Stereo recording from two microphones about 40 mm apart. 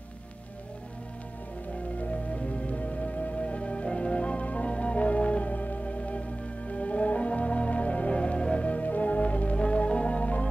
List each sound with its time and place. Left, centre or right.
2.0 s music: left